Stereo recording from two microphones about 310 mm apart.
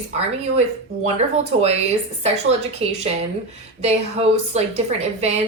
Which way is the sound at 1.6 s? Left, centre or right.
Right.